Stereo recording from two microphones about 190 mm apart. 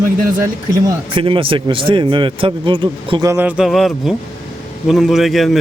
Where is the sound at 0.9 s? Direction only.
25° right (ahead or behind).